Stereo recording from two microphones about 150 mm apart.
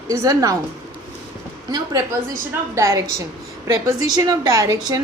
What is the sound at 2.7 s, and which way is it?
A woman's voice, 20° right (ahead or behind).